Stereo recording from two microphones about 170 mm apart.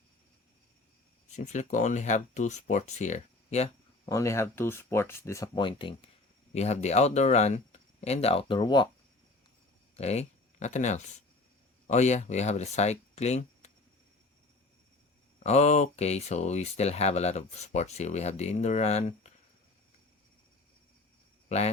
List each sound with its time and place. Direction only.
1.4 s speech: 45° left (ahead or behind)
4.0 s speech: 20° left (ahead or behind)
6.5 s speech: 40° left (ahead or behind)
9.9 s speech: 40° left (ahead or behind)
15.4 s speech: 40° left (ahead or behind)